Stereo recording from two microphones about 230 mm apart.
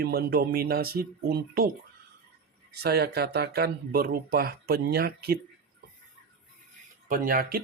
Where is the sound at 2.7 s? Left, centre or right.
Right.